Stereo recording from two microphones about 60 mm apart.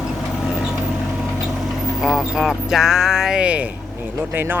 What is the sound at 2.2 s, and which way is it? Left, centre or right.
Speech, centre.